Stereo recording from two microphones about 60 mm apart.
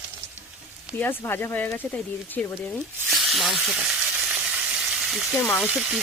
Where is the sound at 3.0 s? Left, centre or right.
Centre.